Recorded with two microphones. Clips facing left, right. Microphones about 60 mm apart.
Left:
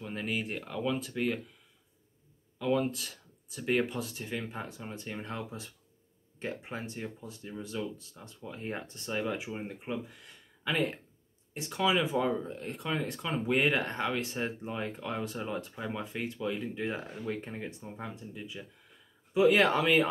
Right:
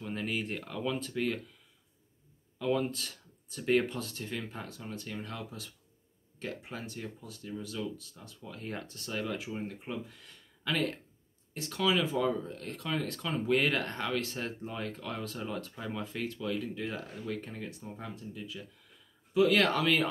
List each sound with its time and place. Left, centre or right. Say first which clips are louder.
0.0 s speech: even; centre
2.6 s speech: left 1 dB; centre